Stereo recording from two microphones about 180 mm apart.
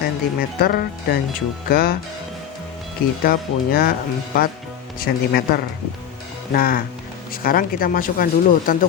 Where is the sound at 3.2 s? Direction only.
55° left (ahead or behind).